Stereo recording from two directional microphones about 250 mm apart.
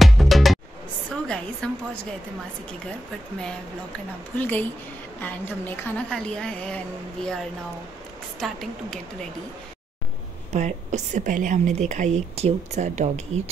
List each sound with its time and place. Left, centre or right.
0.0 s music: centre
1.2 s a woman's voice: centre
4.4 s a woman's voice: centre
10.5 s a woman's voice: right